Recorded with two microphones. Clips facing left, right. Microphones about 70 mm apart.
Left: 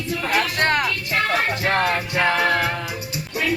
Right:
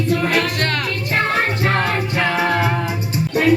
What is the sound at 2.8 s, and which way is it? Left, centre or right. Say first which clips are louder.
Music: right 6 dB; right.